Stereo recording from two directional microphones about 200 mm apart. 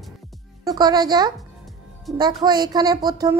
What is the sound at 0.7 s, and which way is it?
A woman's voice, 20° right (ahead or behind).